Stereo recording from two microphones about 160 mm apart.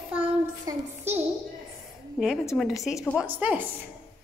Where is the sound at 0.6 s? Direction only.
15° right (ahead or behind).